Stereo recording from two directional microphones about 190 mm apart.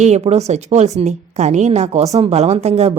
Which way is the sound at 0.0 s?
35° right (ahead or behind).